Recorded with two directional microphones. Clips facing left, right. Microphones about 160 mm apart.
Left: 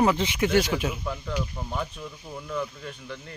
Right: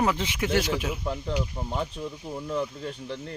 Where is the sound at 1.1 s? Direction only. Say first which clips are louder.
Right 2 dB; 25° right (ahead or behind).